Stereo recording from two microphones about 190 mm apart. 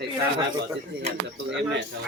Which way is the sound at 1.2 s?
70° right (ahead or behind).